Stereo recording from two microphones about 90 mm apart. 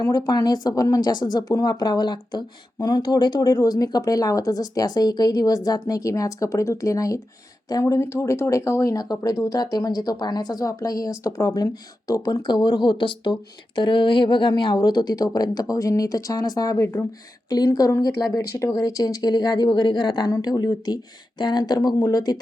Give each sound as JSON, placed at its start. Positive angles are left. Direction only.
{"t": 0.0, "sound": "speech", "side_deg": 50}
{"t": 8.0, "sound": "speech", "side_deg": 30}